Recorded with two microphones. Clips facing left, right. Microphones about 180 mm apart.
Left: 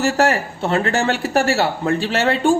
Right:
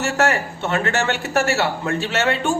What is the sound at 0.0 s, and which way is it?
Speech, 35° left (ahead or behind).